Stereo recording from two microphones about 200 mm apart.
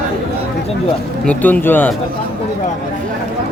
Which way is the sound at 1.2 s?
5° left (ahead or behind).